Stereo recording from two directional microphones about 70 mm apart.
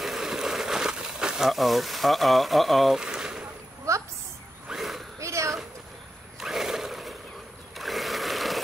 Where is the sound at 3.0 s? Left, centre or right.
Centre.